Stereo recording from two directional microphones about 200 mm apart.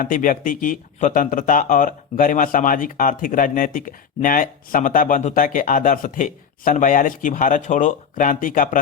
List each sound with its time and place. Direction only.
0.0 s speech: 45° left (ahead or behind)